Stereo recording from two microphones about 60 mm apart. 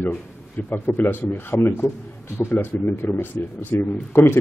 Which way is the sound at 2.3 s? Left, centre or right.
Left.